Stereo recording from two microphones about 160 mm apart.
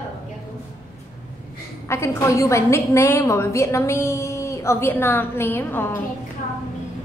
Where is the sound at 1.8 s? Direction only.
15° left (ahead or behind).